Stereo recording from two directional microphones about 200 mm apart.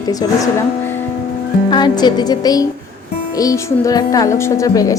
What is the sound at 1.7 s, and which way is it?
Speech, 20° left (ahead or behind).